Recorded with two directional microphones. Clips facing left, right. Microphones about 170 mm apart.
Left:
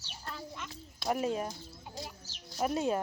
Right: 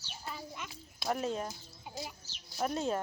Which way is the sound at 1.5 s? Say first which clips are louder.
Left 2 dB; 5° right (ahead or behind).